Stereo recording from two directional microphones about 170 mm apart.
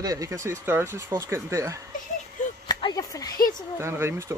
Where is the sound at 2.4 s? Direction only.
45° left (ahead or behind).